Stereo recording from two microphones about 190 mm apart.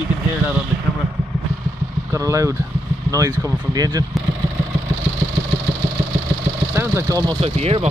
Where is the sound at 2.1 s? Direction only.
15° right (ahead or behind).